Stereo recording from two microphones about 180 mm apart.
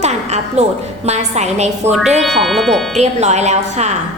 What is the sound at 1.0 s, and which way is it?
Speech, 40° right (ahead or behind).